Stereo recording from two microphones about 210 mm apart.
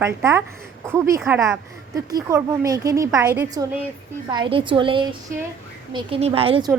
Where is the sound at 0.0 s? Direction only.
10° right (ahead or behind).